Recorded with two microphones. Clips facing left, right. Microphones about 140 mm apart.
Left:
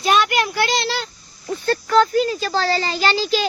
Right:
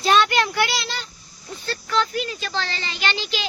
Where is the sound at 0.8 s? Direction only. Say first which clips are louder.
Left 8 dB; 90° left.